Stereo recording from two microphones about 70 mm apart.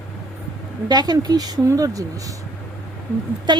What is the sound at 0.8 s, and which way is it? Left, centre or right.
Speech, right.